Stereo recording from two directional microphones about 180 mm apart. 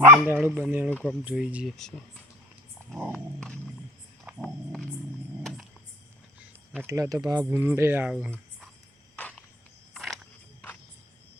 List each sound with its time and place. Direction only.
0.0 s speech: 10° right (ahead or behind)
0.9 s speech: 10° left (ahead or behind)
1.2 s speech: 10° right (ahead or behind)
5.4 s a sound: centre (ahead or behind)
6.8 s speech: 20° right (ahead or behind)
9.1 s a sound: 10° left (ahead or behind)